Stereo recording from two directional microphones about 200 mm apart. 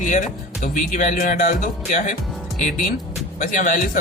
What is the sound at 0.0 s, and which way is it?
Speech, 40° left (ahead or behind).